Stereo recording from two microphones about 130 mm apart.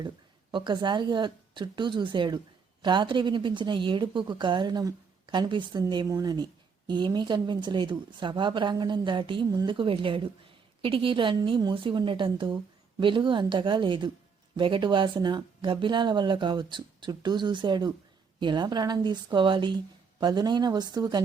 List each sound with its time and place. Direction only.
0.5 s speech: 35° right (ahead or behind)